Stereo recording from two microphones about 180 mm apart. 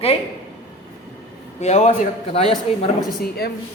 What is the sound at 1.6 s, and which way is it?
A man's voice, 40° left (ahead or behind).